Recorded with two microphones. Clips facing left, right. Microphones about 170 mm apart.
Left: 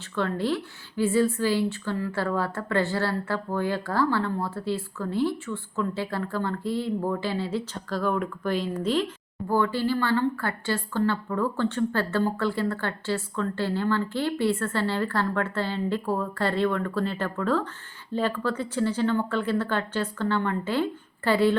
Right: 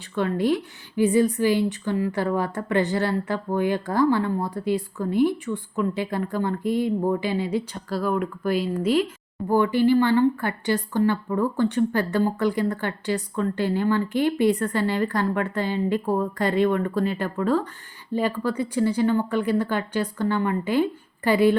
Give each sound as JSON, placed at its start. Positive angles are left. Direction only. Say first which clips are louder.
{"t": 0.2, "sound": "a woman's voice", "louder": "right 4 dB", "side_deg": -15}